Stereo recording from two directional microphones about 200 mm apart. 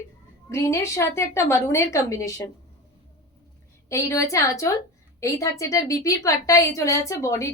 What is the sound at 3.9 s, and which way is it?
A woman's voice, 15° left (ahead or behind).